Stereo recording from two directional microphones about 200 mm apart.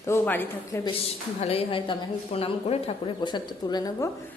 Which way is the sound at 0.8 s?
30° left (ahead or behind).